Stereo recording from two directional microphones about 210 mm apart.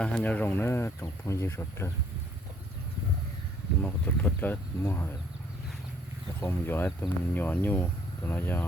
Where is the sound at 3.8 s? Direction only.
10° left (ahead or behind).